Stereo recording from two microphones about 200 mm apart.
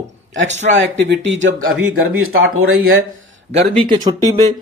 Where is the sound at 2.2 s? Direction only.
90° right.